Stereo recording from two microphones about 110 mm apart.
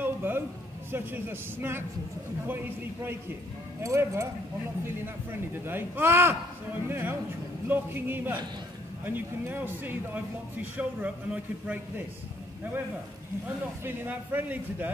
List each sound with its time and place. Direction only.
0.0 s a sound: 20° right (ahead or behind)
0.9 s a man's voice: 20° right (ahead or behind)
13.8 s speech: 20° right (ahead or behind)